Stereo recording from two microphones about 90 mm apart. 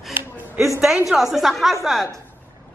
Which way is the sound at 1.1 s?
Centre (ahead or behind).